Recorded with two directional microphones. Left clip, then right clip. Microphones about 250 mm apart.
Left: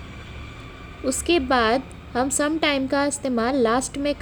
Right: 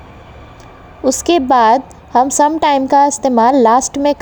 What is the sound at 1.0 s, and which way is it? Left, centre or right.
A woman's voice, right.